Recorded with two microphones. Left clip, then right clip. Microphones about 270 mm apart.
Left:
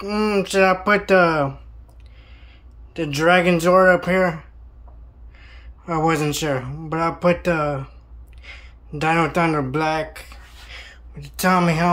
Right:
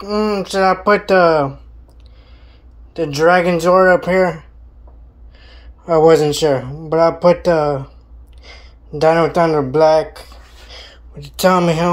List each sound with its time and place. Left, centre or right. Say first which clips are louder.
0.0 s speech: right 4 dB; centre
0.4 s speech: right 1 dB; centre
0.8 s speech: right 5 dB; centre
1.1 s speech: right 4 dB; left
3.2 s speech: right 4 dB; centre
4.0 s speech: right 5 dB; centre
5.3 s a sound: right 2 dB; centre
6.3 s speech: right 8 dB; centre
10.7 s a sound: right 2 dB; centre